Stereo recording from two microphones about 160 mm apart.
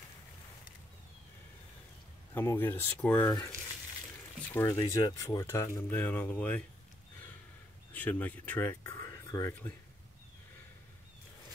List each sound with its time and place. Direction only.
2.3 s speech: 10° left (ahead or behind)
4.5 s speech: 15° left (ahead or behind)
7.9 s speech: 10° left (ahead or behind)